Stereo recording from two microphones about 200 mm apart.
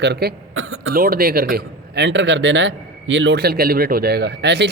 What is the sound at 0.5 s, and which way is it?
Speech, 90° right.